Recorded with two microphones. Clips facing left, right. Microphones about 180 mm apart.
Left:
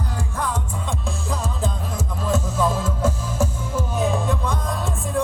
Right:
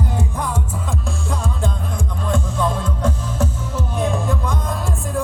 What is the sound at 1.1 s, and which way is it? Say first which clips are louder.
Music: right 2 dB; centre (ahead or behind).